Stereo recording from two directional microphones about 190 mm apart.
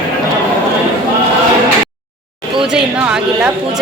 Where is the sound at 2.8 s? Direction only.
5° right (ahead or behind).